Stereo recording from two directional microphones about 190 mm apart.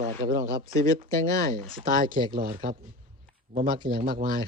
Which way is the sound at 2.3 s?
50° right (ahead or behind).